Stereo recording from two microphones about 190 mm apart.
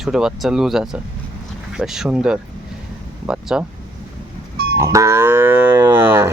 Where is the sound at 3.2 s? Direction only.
5° right (ahead or behind).